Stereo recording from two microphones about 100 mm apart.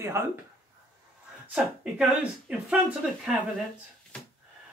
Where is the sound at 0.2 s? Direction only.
25° right (ahead or behind).